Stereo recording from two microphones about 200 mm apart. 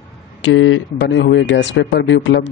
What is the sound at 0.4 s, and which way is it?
Speech, 70° left (ahead or behind).